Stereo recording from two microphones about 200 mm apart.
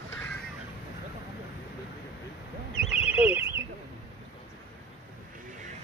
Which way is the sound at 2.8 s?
5° right (ahead or behind).